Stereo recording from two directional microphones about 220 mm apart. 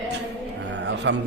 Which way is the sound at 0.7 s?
55° right (ahead or behind).